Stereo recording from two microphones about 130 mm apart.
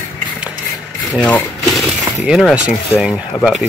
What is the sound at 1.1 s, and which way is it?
Speech, 10° left (ahead or behind).